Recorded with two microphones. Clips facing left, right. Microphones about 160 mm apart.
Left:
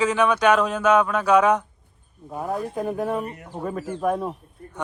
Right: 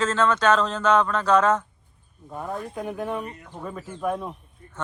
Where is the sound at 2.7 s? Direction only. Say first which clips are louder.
Left 3 dB; 35° left (ahead or behind).